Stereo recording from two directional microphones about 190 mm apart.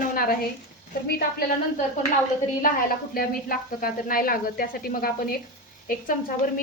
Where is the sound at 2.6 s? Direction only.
50° left (ahead or behind).